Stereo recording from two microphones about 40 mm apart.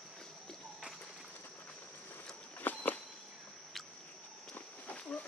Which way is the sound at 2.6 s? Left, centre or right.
Left.